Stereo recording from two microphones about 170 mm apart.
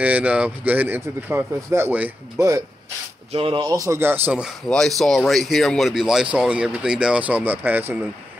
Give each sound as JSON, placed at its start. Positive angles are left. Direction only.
{"t": 0.0, "sound": "speech", "side_deg": -10}
{"t": 3.3, "sound": "speech", "side_deg": -30}
{"t": 3.6, "sound": "speech", "side_deg": -20}
{"t": 4.6, "sound": "speech", "side_deg": 0}